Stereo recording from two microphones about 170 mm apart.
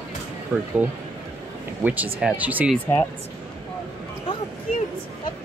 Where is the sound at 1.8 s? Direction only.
10° right (ahead or behind).